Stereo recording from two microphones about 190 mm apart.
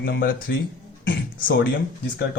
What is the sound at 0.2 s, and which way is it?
Speech, 50° left (ahead or behind).